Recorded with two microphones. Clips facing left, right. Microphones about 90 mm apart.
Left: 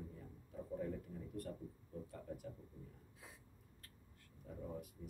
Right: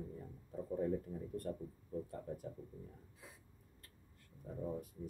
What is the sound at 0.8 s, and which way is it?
Speech, 35° right (ahead or behind).